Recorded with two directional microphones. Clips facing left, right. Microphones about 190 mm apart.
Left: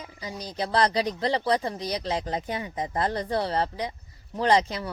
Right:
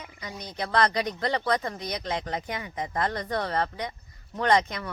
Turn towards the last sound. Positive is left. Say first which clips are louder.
# left 1 dB
turn(degrees=30)  # may be behind; listen again after turning